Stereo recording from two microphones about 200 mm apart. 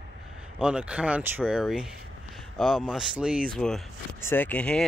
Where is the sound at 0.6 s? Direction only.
5° right (ahead or behind).